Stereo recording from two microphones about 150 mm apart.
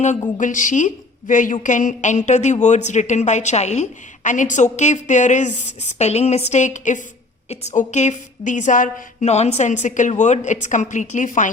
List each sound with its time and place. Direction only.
0.3 s a woman's voice: 60° left (ahead or behind)